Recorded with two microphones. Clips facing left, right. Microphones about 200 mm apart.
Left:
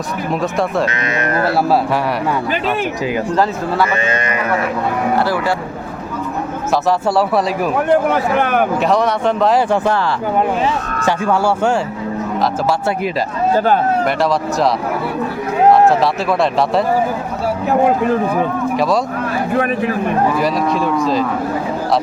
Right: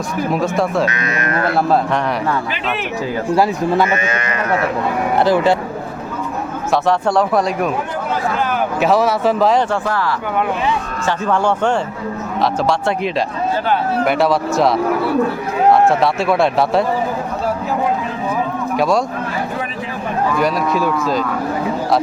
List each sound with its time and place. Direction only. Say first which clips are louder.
0.3 s speech: even; centre (ahead or behind)
0.9 s speech: left 2 dB; 25° left (ahead or behind)
1.5 s speech: right 1 dB; 5° left (ahead or behind)
4.0 s speech: left 2 dB; 25° left (ahead or behind)
5.1 s speech: right 6 dB; 20° right (ahead or behind)
6.8 s speech: even; centre (ahead or behind)
7.9 s speech: left 7 dB; 60° left (ahead or behind)
8.8 s speech: right 1 dB; 5° right (ahead or behind)
9.8 s speech: left 3 dB; 25° left (ahead or behind)
11.0 s speech: left 2 dB; 10° left (ahead or behind)
14.0 s speech: right 1 dB; centre (ahead or behind)
15.9 s speech: even; centre (ahead or behind)
17.7 s speech: left 6 dB; 60° left (ahead or behind)
20.4 s speech: even; centre (ahead or behind)